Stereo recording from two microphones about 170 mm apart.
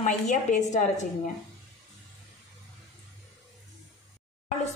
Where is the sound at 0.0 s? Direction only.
45° left (ahead or behind).